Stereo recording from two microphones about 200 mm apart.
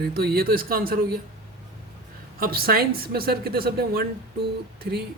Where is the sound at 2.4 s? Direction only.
50° right (ahead or behind).